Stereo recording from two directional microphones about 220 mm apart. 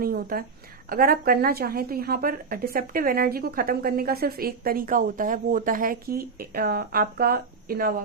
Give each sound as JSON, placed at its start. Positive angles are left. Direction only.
{"t": 0.0, "sound": "a woman's voice", "side_deg": -40}